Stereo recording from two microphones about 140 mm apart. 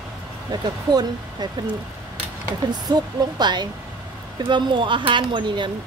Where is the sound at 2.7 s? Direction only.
30° right (ahead or behind).